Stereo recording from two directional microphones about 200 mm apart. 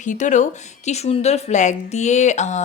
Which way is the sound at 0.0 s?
40° left (ahead or behind).